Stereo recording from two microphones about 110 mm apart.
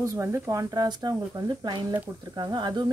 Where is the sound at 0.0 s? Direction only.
25° right (ahead or behind).